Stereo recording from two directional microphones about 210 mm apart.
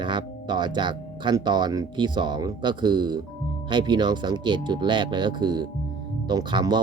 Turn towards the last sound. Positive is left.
turn(degrees=-20)  # may be behind; listen again after turning